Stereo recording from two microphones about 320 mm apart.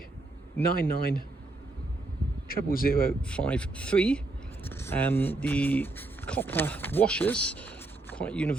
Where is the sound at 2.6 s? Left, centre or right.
Left.